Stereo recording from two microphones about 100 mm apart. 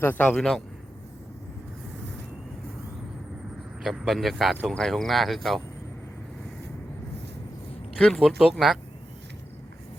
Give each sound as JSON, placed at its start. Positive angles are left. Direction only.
{"t": 0.0, "sound": "a man's voice", "side_deg": 20}
{"t": 0.3, "sound": "speech", "side_deg": 5}
{"t": 3.8, "sound": "speech", "side_deg": 0}
{"t": 7.9, "sound": "speech", "side_deg": 5}